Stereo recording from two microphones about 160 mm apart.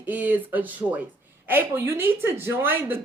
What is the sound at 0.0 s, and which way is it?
A woman's voice, 10° right (ahead or behind).